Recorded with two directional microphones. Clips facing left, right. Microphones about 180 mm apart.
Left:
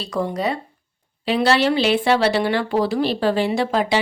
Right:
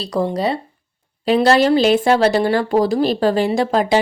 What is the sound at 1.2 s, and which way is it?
Speech, 45° right (ahead or behind).